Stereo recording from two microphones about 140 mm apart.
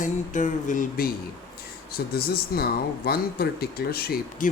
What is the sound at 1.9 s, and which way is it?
Speech, 90° left.